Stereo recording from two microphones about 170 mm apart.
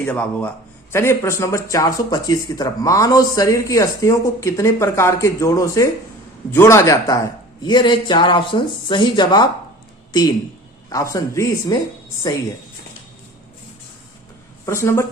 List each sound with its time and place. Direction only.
0.0 s speech: 5° left (ahead or behind)
14.7 s speech: 15° left (ahead or behind)